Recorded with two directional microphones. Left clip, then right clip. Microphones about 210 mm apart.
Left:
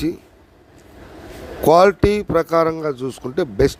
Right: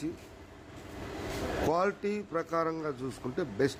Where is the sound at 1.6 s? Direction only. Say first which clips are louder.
Left 19 dB; 40° left (ahead or behind).